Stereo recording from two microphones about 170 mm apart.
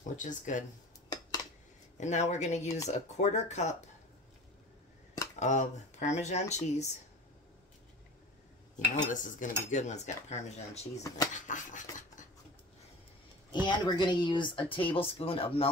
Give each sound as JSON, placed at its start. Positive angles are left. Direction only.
{"t": 0.2, "sound": "cutlery", "side_deg": 50}
{"t": 2.0, "sound": "cutlery", "side_deg": 45}
{"t": 5.4, "sound": "cutlery", "side_deg": 45}
{"t": 8.7, "sound": "cutlery", "side_deg": 50}
{"t": 11.0, "sound": "speech", "side_deg": 20}
{"t": 11.3, "sound": "a sound", "side_deg": 45}
{"t": 13.5, "sound": "speech", "side_deg": 25}